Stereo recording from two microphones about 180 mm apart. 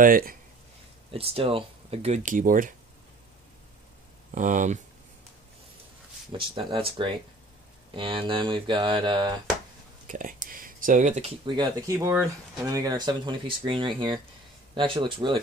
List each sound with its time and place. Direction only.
0.0 s speech: 50° right (ahead or behind)
1.1 s speech: 30° right (ahead or behind); by 2.7 s 50° right (ahead or behind)
4.3 s speech: 45° right (ahead or behind)
6.3 s speech: 30° right (ahead or behind)
10.0 s speech: 45° right (ahead or behind); by 15.3 s 25° right (ahead or behind)